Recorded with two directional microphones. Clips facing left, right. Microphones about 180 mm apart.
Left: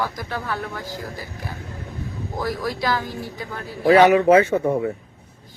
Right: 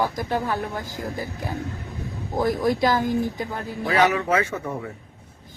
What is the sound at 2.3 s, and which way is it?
Speech, 20° right (ahead or behind).